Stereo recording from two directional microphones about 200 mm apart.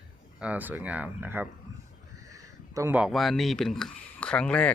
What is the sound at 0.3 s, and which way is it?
Speech, 5° right (ahead or behind).